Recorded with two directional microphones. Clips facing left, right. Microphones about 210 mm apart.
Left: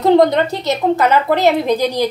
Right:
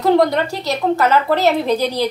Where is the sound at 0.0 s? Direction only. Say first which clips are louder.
Left 3 dB; 20° left (ahead or behind).